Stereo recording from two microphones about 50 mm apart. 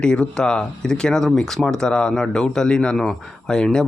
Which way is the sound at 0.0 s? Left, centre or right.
Centre.